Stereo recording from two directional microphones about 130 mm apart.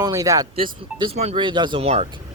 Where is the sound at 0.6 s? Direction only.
40° right (ahead or behind).